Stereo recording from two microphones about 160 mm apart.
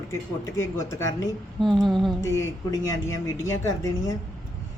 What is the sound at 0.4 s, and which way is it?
Speech, 20° left (ahead or behind).